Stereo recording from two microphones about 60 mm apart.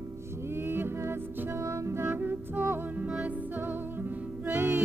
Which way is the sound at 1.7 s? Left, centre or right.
Right.